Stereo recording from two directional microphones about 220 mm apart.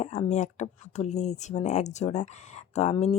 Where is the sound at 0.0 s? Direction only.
30° left (ahead or behind).